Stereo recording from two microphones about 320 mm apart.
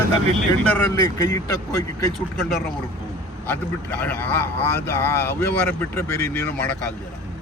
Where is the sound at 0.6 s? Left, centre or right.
Centre.